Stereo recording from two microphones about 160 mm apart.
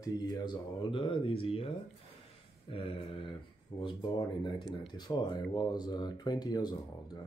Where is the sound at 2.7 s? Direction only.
35° left (ahead or behind).